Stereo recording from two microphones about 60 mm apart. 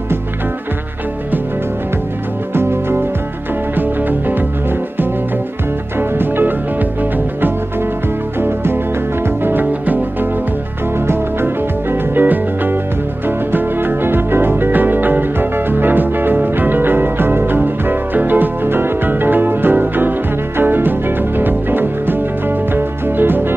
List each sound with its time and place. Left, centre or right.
2.5 s music: right
3.7 s music: right
11.1 s music: right